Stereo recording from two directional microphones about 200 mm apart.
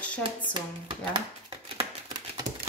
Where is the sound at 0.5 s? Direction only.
25° right (ahead or behind).